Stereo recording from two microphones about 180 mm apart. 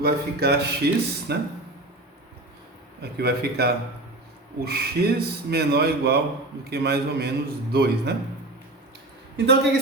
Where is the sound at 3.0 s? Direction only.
65° right (ahead or behind).